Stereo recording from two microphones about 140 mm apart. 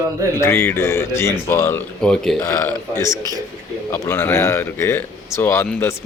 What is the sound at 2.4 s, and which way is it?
Speech, 20° left (ahead or behind).